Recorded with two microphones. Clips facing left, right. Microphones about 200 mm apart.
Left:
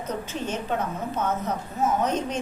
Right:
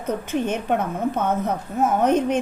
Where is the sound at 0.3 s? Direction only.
60° right (ahead or behind).